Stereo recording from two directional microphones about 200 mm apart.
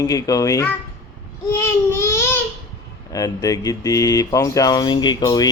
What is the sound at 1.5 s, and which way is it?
Baby cry, 10° left (ahead or behind).